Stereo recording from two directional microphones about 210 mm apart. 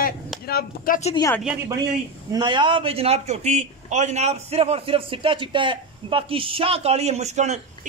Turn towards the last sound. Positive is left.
turn(degrees=-35)  # may be behind; listen again after turning